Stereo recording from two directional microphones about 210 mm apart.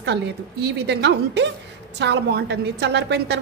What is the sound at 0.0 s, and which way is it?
A woman's voice, 55° right (ahead or behind).